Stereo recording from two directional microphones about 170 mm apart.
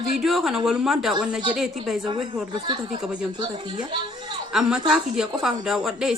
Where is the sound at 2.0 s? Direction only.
30° right (ahead or behind).